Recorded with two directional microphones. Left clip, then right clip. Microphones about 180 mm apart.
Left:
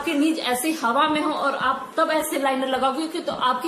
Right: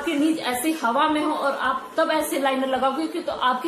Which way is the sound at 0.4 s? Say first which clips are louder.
Left 1 dB; 10° left (ahead or behind).